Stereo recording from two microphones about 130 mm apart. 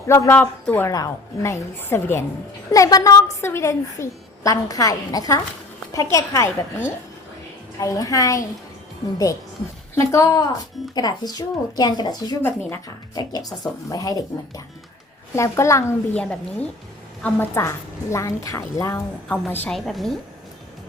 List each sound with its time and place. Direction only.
0.1 s a woman's voice: 20° left (ahead or behind)
0.9 s a woman's voice: 25° left (ahead or behind)
9.9 s a woman's voice: 25° left (ahead or behind)
12.4 s a woman's voice: 15° left (ahead or behind)
13.1 s a woman's voice: 30° left (ahead or behind)
16.1 s a woman's voice: 10° left (ahead or behind)
19.7 s a woman's voice: centre (ahead or behind)